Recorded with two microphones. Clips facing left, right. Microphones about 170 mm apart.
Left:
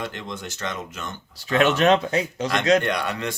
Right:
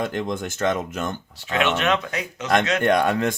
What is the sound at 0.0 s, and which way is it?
Speech, 45° right (ahead or behind).